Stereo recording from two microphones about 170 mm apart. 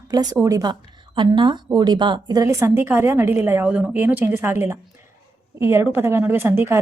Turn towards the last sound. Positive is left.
turn(degrees=-15)  # may be behind; listen again after turning